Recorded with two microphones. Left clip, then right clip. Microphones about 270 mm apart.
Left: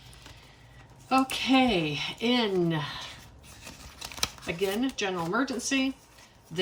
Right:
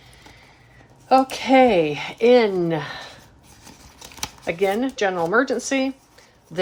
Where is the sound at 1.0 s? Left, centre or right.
Centre.